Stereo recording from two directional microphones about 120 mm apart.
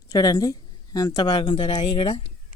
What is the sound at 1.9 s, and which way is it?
Speech, 65° left (ahead or behind).